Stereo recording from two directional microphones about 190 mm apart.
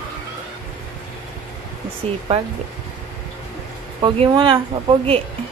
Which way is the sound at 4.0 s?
30° right (ahead or behind).